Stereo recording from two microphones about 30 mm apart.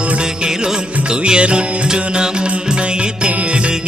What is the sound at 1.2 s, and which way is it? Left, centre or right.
Music, right.